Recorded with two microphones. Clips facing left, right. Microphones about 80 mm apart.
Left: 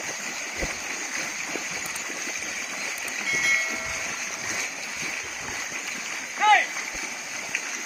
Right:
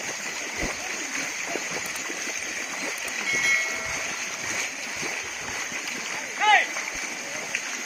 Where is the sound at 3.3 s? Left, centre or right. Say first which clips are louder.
Even; centre.